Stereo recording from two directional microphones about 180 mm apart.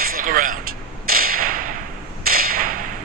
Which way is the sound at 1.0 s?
55° right (ahead or behind).